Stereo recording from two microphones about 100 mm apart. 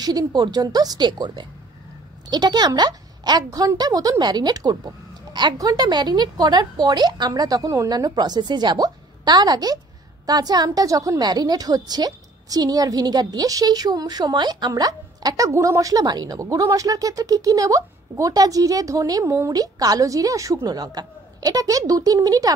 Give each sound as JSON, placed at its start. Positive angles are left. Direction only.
{"t": 0.0, "sound": "a woman's voice", "side_deg": -40}